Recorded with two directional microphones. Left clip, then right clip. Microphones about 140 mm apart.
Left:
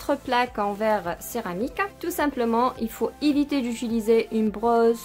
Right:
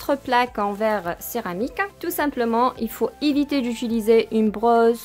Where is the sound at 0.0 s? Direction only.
35° right (ahead or behind).